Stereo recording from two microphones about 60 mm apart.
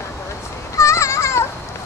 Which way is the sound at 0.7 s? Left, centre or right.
Left.